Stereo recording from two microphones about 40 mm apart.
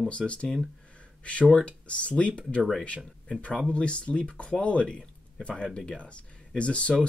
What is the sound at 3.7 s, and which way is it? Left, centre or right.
Speech, left.